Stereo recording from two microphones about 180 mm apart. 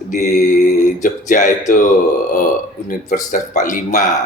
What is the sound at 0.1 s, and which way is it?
Speech, 45° left (ahead or behind).